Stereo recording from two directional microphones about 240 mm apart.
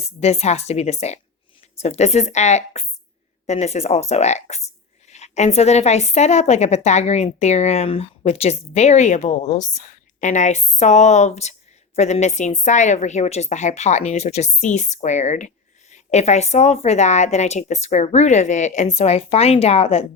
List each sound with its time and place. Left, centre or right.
0.2 s a woman's voice: left